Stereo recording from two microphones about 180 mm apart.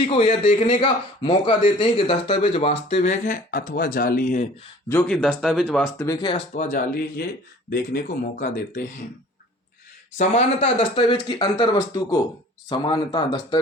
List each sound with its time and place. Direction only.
0.0 s a man's voice: 35° left (ahead or behind)
5.0 s speech: 5° left (ahead or behind)
6.0 s speech: 15° left (ahead or behind)
6.5 s speech: 50° left (ahead or behind)
10.2 s speech: 40° left (ahead or behind)